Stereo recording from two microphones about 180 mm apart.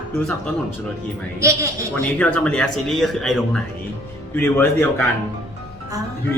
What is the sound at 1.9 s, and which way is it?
Speech, 10° left (ahead or behind).